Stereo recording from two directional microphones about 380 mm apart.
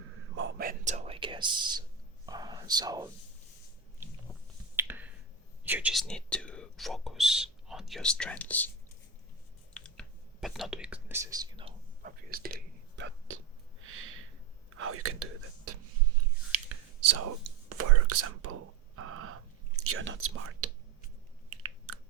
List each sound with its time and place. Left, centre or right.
0.3 s whispering: right; by 3.1 s centre
4.8 s finger snapping: centre
5.6 s speech: centre
9.7 s whispering: centre; by 13.4 s right
13.8 s a sound: right
14.8 s speech: right
16.5 s whispering: right
21.5 s chewing: right